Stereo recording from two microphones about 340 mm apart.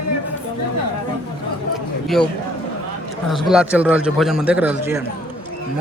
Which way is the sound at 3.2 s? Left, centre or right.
Centre.